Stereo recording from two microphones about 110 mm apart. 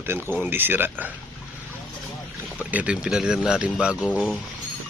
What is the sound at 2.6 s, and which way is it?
Speech, 10° right (ahead or behind).